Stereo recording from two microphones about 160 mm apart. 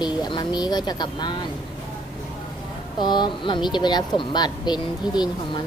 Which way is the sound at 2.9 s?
25° left (ahead or behind).